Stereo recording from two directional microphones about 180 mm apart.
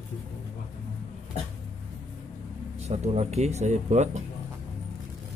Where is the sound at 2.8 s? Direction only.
40° right (ahead or behind).